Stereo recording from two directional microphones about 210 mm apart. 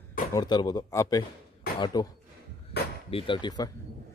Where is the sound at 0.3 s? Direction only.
20° left (ahead or behind).